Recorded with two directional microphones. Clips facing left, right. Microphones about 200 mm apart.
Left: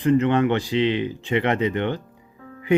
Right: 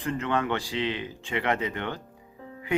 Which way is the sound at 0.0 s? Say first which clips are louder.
Left 10 dB; 20° left (ahead or behind).